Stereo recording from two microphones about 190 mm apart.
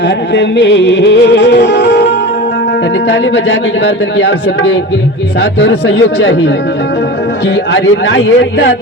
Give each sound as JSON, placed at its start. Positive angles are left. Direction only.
{"t": 0.3, "sound": "music", "side_deg": 65}
{"t": 3.1, "sound": "speech", "side_deg": 75}
{"t": 5.4, "sound": "music", "side_deg": 65}
{"t": 7.4, "sound": "speech", "side_deg": 70}